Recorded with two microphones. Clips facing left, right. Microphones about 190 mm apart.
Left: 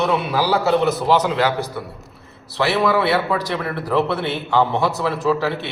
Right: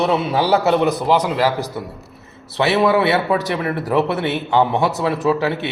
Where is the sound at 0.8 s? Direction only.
15° right (ahead or behind).